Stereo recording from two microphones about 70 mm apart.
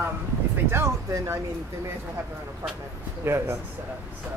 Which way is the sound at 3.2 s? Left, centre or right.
Right.